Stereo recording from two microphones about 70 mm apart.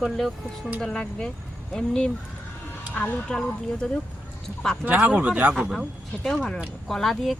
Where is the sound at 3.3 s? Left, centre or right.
Centre.